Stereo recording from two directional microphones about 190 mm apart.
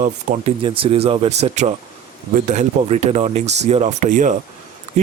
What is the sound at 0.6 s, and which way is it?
Speech, 30° right (ahead or behind).